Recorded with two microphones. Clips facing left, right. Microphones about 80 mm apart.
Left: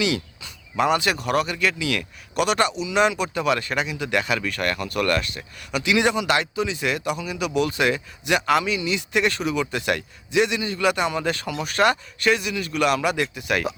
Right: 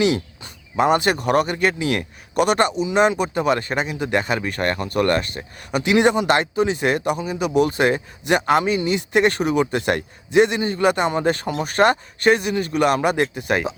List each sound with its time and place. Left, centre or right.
0.0 s speech: right